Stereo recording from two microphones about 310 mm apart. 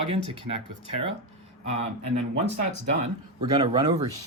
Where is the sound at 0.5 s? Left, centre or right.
Right.